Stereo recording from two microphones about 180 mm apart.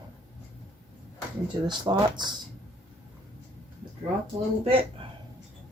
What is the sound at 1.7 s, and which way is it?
Speech, 25° right (ahead or behind).